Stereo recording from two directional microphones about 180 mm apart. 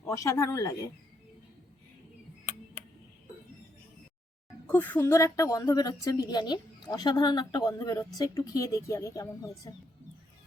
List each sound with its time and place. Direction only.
0.0 s speech: 15° left (ahead or behind)
4.6 s a woman's voice: 10° left (ahead or behind)